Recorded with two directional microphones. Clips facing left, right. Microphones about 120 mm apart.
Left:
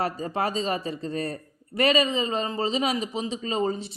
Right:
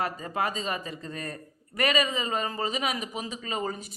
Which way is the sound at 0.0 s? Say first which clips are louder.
Left 3 dB; 30° left (ahead or behind).